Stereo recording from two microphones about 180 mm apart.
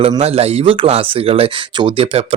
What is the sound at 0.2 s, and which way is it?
Speech, 35° right (ahead or behind).